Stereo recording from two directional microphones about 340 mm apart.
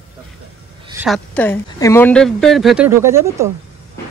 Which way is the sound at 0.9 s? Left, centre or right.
Centre.